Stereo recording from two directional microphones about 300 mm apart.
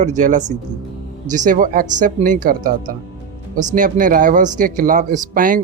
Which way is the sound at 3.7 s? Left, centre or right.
Right.